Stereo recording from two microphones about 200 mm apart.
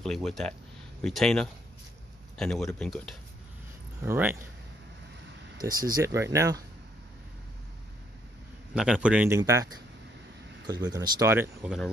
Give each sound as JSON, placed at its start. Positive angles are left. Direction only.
{"t": 0.0, "sound": "speech", "side_deg": 0}
{"t": 4.0, "sound": "speech", "side_deg": -10}
{"t": 5.6, "sound": "speech", "side_deg": -20}
{"t": 8.7, "sound": "speech", "side_deg": -5}
{"t": 9.4, "sound": "speech", "side_deg": -15}
{"t": 10.7, "sound": "speech", "side_deg": -20}